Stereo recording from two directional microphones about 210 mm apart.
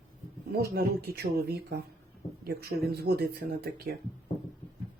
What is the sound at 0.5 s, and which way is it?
Speech, 45° right (ahead or behind).